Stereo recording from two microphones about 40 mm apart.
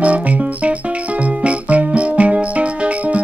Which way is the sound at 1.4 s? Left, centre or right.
Right.